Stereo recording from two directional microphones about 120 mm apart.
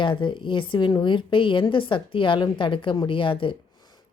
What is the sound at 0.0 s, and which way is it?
Speech, 45° left (ahead or behind).